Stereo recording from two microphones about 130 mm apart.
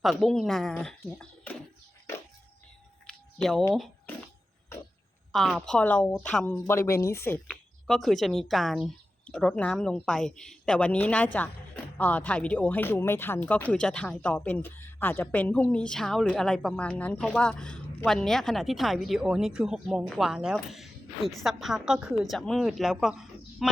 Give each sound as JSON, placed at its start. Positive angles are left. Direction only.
{"t": 0.0, "sound": "speech", "side_deg": 0}
{"t": 3.1, "sound": "a sound", "side_deg": 5}
{"t": 5.3, "sound": "speech", "side_deg": 0}
{"t": 6.6, "sound": "speech", "side_deg": 20}
{"t": 7.4, "sound": "speech", "side_deg": 5}